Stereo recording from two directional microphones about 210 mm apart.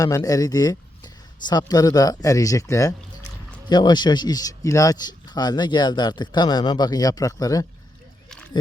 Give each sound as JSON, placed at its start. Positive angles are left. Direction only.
{"t": 0.0, "sound": "speech", "side_deg": 15}